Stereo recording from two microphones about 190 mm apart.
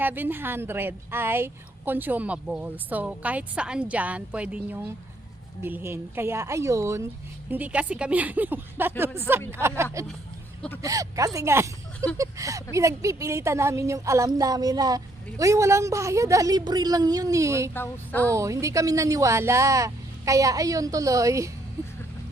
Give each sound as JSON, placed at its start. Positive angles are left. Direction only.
{"t": 0.0, "sound": "speech", "side_deg": -10}
{"t": 17.7, "sound": "a sound", "side_deg": 10}
{"t": 18.3, "sound": "speech", "side_deg": -15}